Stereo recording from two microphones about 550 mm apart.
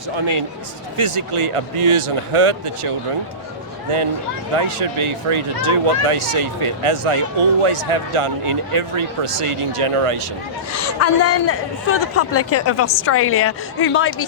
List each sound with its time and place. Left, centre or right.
0.2 s speech: right
4.5 s speech: right
10.8 s speech: left